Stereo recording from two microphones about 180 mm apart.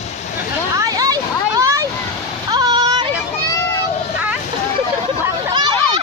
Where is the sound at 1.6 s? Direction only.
15° right (ahead or behind).